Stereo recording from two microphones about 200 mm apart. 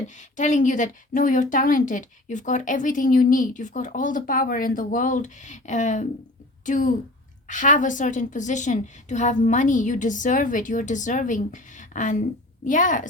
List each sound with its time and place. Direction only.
0.1 s speech: 35° left (ahead or behind)